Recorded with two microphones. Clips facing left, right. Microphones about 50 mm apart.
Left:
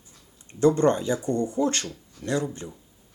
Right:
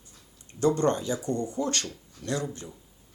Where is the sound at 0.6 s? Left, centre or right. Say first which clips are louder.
Left 4 dB; left.